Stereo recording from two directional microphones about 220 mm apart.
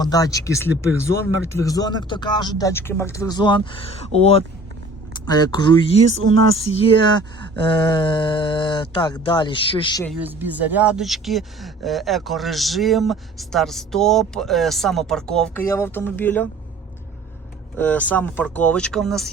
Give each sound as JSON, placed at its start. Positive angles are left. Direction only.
{"t": 0.0, "sound": "speech", "side_deg": 15}
{"t": 1.0, "sound": "speech", "side_deg": -70}
{"t": 1.6, "sound": "speech", "side_deg": 15}
{"t": 10.2, "sound": "speech", "side_deg": -10}
{"t": 17.7, "sound": "speech", "side_deg": 5}